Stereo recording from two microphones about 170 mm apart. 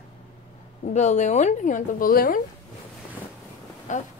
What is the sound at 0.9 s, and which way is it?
A woman's voice, 45° left (ahead or behind).